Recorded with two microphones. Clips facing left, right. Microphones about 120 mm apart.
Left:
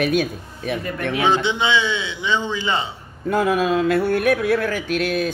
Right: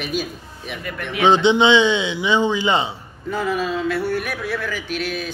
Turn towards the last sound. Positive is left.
turn(degrees=45)  # may be behind; listen again after turning